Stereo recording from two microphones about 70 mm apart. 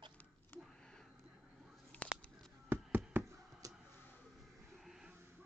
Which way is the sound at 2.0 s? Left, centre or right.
Centre.